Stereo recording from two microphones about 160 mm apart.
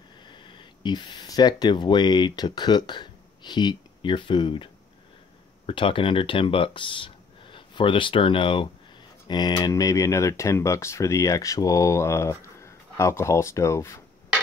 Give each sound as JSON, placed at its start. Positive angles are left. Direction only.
{"t": 0.2, "sound": "speech", "side_deg": 30}
{"t": 5.7, "sound": "speech", "side_deg": 35}